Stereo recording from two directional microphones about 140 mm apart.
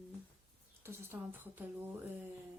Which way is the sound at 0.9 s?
15° right (ahead or behind).